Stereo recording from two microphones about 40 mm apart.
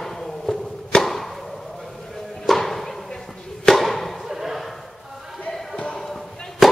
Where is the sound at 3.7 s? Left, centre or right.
Centre.